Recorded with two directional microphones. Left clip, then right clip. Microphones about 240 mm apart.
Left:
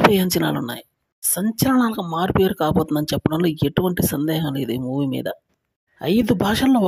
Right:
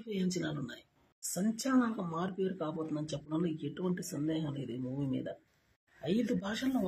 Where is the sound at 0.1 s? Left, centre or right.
Left.